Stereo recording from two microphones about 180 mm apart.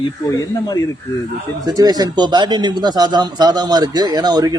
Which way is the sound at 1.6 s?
20° right (ahead or behind).